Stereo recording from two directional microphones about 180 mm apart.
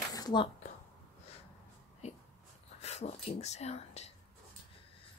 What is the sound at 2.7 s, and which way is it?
Whispering, 35° left (ahead or behind).